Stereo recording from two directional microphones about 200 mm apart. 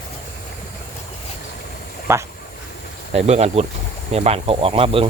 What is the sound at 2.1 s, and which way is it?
Speech, 15° right (ahead or behind).